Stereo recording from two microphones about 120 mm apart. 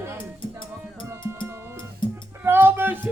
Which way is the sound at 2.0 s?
40° left (ahead or behind).